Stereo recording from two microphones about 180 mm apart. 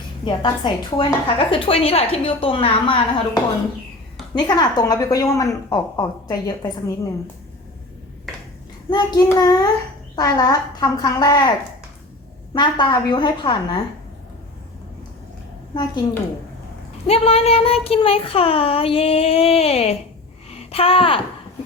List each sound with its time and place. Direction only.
0.3 s a woman's voice: 25° left (ahead or behind)
8.9 s a woman's voice: 20° left (ahead or behind)
12.5 s a woman's voice: 25° left (ahead or behind)
15.7 s a woman's voice: 25° left (ahead or behind)
17.1 s speech: 35° left (ahead or behind)